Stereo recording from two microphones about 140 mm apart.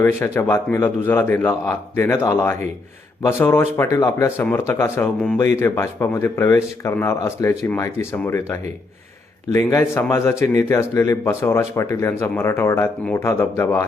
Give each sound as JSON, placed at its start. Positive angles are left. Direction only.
{"t": 0.0, "sound": "a man's voice", "side_deg": 15}
{"t": 5.5, "sound": "a man's voice", "side_deg": 20}